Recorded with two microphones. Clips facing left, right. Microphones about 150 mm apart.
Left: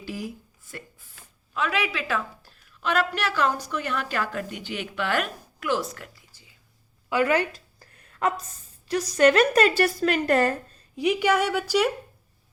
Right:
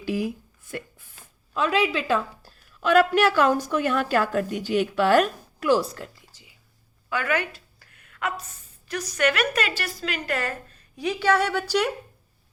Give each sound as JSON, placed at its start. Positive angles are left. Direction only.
{"t": 0.0, "sound": "speech", "side_deg": -65}
{"t": 1.5, "sound": "a woman's voice", "side_deg": -30}
{"t": 2.8, "sound": "a woman's voice", "side_deg": -45}
{"t": 7.1, "sound": "a sound", "side_deg": 30}
{"t": 9.1, "sound": "a woman's voice", "side_deg": 35}
{"t": 10.9, "sound": "a woman's voice", "side_deg": 20}